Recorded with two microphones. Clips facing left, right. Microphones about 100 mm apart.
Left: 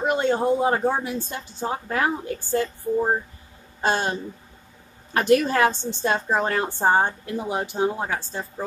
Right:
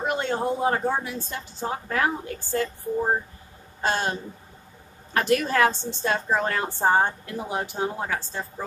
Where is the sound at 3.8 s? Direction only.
20° left (ahead or behind).